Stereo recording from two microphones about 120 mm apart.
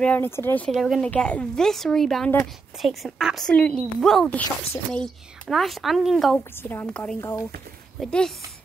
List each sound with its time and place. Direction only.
0.0 s speech: 15° left (ahead or behind)
0.7 s a woman's voice: centre (ahead or behind)
1.0 s a woman's voice: 10° left (ahead or behind)
6.6 s speech: 20° left (ahead or behind)
8.0 s a woman's voice: 5° left (ahead or behind)